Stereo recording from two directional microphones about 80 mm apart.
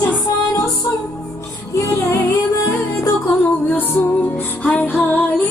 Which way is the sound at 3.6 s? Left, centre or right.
Left.